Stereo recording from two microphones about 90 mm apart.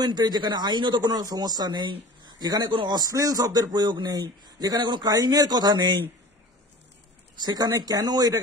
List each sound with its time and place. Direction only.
0.0 s speech: 50° right (ahead or behind)
7.4 s speech: 50° right (ahead or behind)